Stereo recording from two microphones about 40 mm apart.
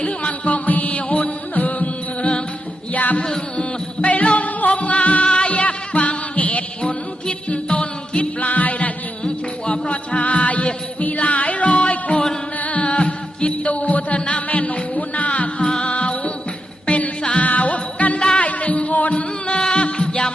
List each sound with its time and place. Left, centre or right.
0.0 s music: left
2.9 s music: left
3.2 s music: centre
4.0 s music: left
6.8 s music: left
9.2 s music: left
18.2 s music: left
18.4 s music: left